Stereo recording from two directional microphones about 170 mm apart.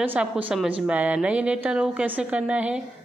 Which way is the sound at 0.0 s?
10° right (ahead or behind).